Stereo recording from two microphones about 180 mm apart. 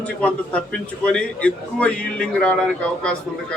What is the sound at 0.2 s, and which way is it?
A man's voice, 5° left (ahead or behind).